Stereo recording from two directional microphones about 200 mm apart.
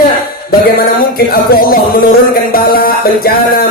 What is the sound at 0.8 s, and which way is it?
Music, 45° left (ahead or behind).